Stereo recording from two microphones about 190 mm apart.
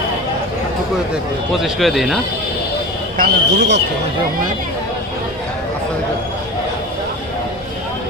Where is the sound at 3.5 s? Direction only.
65° right (ahead or behind).